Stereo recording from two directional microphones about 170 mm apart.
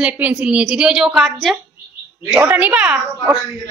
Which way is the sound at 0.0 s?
10° right (ahead or behind).